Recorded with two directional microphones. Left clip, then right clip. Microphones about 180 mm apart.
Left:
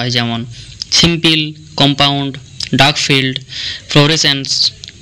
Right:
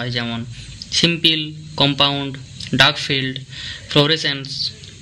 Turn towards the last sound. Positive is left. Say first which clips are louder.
# left 10 dB
turn(degrees=30)  # may be behind; listen again after turning